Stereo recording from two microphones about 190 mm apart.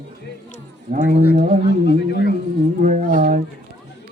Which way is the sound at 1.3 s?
40° right (ahead or behind).